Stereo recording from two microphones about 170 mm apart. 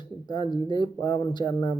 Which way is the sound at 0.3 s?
25° left (ahead or behind).